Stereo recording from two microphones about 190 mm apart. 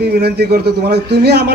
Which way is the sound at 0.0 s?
60° right (ahead or behind).